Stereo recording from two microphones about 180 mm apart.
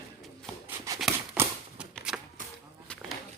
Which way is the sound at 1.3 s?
5° right (ahead or behind).